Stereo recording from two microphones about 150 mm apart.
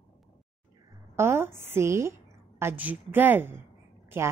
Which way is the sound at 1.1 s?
15° right (ahead or behind).